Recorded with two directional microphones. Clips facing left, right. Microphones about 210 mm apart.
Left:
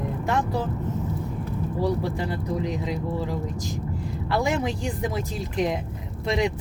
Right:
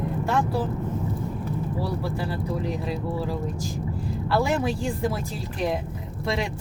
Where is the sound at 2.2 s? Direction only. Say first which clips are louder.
Left 1 dB; 20° left (ahead or behind).